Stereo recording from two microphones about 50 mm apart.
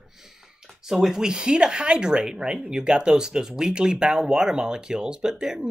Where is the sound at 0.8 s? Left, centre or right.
Centre.